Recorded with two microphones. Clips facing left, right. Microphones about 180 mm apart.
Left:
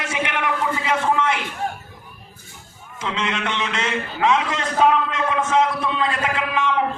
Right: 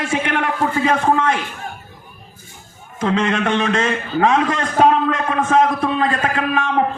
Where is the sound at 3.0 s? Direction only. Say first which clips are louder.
Right 7 dB; 45° right (ahead or behind).